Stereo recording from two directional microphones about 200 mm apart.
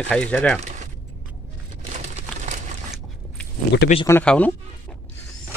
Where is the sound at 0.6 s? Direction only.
35° right (ahead or behind).